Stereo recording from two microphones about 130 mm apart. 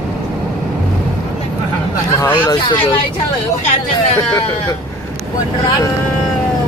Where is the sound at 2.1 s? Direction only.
25° left (ahead or behind).